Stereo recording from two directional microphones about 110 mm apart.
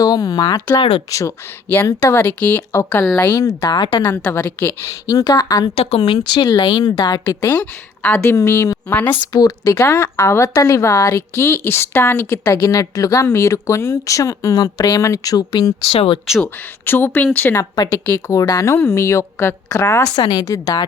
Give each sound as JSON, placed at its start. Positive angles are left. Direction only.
{"t": 0.0, "sound": "a woman's voice", "side_deg": 35}
{"t": 1.7, "sound": "a woman's voice", "side_deg": 20}
{"t": 4.2, "sound": "a woman's voice", "side_deg": 20}
{"t": 5.7, "sound": "speech", "side_deg": 65}
{"t": 6.2, "sound": "a woman's voice", "side_deg": 40}
{"t": 7.5, "sound": "a woman's voice", "side_deg": 10}
{"t": 8.2, "sound": "speech", "side_deg": 25}
{"t": 8.9, "sound": "a woman's voice", "side_deg": 15}
{"t": 9.3, "sound": "speech", "side_deg": 35}
{"t": 15.9, "sound": "speech", "side_deg": 55}
{"t": 16.4, "sound": "a woman's voice", "side_deg": 20}
{"t": 18.3, "sound": "speech", "side_deg": 30}
{"t": 20.1, "sound": "a woman's voice", "side_deg": 35}